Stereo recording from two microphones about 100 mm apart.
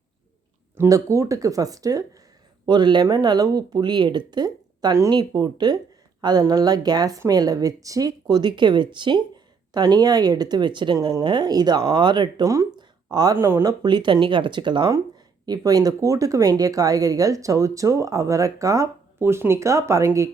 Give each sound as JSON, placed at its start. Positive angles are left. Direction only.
{"t": 0.8, "sound": "speech", "side_deg": -30}
{"t": 2.6, "sound": "a woman's voice", "side_deg": -50}
{"t": 12.4, "sound": "speech", "side_deg": -30}
{"t": 12.7, "sound": "a sound", "side_deg": -45}
{"t": 13.4, "sound": "speech", "side_deg": -25}
{"t": 13.7, "sound": "speech", "side_deg": -50}
{"t": 15.4, "sound": "speech", "side_deg": -40}